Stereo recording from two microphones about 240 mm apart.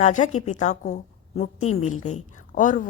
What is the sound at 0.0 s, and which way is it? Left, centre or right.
A woman's voice, left.